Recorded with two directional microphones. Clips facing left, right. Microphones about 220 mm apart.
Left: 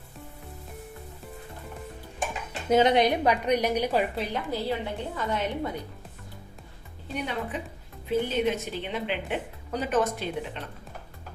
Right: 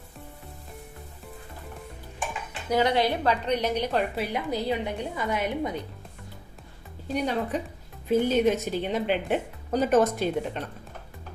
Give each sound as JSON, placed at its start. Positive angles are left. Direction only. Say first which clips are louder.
{"t": 2.6, "sound": "a woman's voice", "louder": "left 3 dB", "side_deg": 20}
{"t": 4.1, "sound": "a woman's voice", "louder": "right 2 dB", "side_deg": -10}
{"t": 7.2, "sound": "a woman's voice", "louder": "right 4 dB", "side_deg": -40}